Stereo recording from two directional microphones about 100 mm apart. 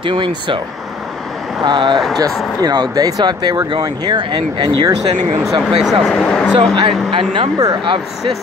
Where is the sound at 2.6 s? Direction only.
40° right (ahead or behind).